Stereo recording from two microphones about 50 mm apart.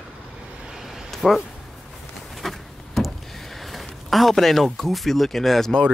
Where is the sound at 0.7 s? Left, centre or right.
Centre.